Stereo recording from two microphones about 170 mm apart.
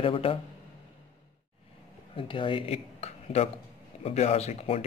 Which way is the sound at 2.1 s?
30° left (ahead or behind).